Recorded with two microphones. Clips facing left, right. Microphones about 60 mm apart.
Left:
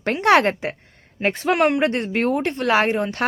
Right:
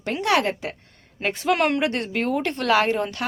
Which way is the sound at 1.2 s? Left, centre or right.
Left.